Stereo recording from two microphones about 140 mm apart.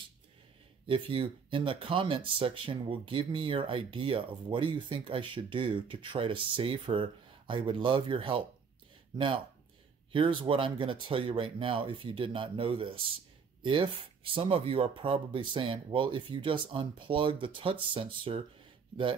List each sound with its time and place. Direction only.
0.8 s speech: 40° right (ahead or behind)
10.1 s speech: 35° right (ahead or behind)